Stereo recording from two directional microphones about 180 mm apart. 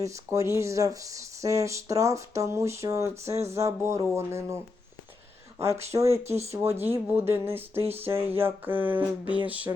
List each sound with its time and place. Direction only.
0.0 s speech: 15° right (ahead or behind)
9.2 s music: 25° left (ahead or behind)
9.5 s speech: 10° right (ahead or behind)